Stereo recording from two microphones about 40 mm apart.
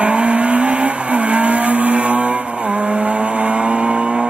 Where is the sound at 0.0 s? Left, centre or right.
Right.